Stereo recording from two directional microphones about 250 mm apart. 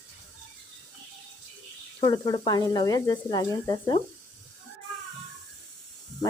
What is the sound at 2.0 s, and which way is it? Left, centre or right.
Speech, centre.